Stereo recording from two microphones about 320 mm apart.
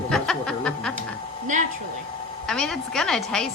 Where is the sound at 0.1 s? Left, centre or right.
Centre.